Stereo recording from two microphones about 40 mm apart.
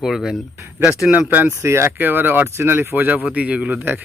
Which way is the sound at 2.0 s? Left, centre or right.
Right.